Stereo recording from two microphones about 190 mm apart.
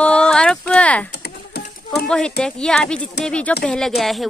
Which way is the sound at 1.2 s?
60° left (ahead or behind).